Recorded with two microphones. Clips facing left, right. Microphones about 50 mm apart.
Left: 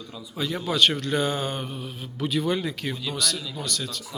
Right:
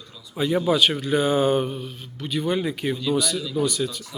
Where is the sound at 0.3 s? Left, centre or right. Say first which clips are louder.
Right 7 dB; centre.